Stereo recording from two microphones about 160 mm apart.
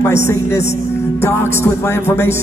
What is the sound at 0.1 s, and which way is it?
Speech, 15° left (ahead or behind).